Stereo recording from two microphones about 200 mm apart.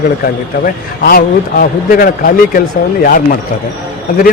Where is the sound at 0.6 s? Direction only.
50° left (ahead or behind).